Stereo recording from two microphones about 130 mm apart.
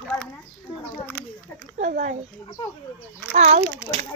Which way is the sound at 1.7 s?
65° right (ahead or behind).